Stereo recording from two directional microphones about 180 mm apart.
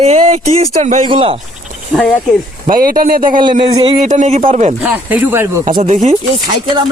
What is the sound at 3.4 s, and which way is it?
Speech, 30° right (ahead or behind).